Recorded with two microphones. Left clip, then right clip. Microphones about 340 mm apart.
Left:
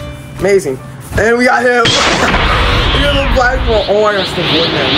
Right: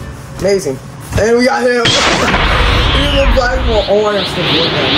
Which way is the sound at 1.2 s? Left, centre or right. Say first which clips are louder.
Left 1 dB; centre.